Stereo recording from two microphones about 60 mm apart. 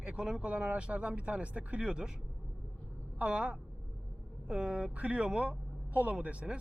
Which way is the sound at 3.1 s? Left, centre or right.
Right.